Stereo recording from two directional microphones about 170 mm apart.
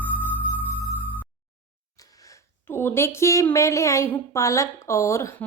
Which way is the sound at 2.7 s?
15° left (ahead or behind).